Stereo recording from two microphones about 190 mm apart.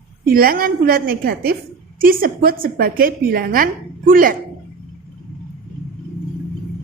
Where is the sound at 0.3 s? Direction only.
50° right (ahead or behind).